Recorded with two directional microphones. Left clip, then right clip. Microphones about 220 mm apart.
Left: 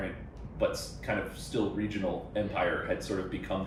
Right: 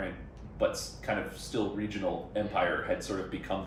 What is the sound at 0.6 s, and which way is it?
Speech, 15° right (ahead or behind).